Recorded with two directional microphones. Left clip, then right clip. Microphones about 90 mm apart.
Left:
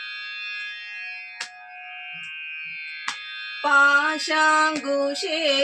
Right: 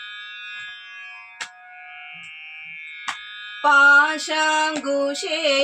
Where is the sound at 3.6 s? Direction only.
20° right (ahead or behind).